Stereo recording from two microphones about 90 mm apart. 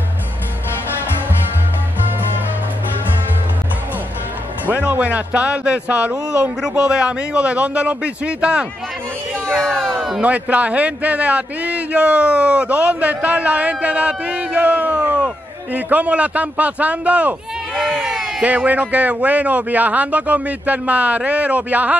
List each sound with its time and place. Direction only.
4.6 s a man's voice: 20° right (ahead or behind)
9.3 s speech: 5° left (ahead or behind)
10.2 s a man's voice: 15° right (ahead or behind)